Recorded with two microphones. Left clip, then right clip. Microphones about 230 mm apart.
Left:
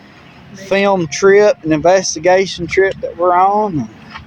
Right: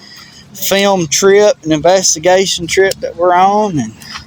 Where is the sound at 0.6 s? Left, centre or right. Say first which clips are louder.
Right 2 dB; right.